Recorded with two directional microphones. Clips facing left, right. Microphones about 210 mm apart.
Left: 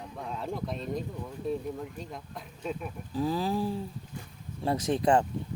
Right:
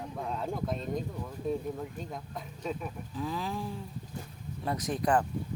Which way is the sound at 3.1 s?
35° left (ahead or behind).